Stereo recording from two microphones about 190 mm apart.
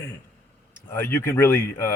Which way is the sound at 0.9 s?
10° left (ahead or behind).